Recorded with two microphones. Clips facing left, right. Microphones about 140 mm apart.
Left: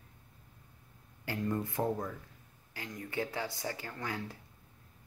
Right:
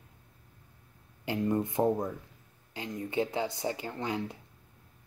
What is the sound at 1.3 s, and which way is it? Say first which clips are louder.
Speech: right 5 dB; 20° right (ahead or behind).